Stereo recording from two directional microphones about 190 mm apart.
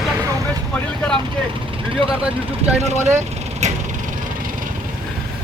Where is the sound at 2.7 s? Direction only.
35° right (ahead or behind).